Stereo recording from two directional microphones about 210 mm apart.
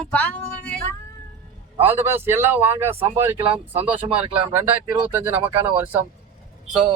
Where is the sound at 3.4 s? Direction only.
25° right (ahead or behind).